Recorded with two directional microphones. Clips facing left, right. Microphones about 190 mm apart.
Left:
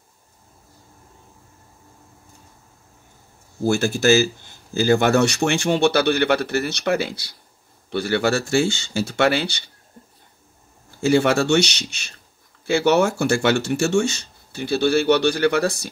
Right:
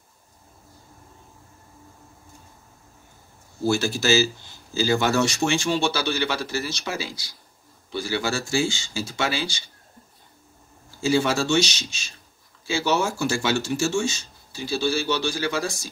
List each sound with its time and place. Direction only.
3.6 s speech: 50° left (ahead or behind)
11.0 s speech: 60° left (ahead or behind)